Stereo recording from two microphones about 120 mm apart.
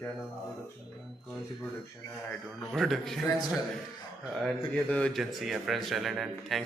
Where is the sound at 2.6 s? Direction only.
Centre (ahead or behind).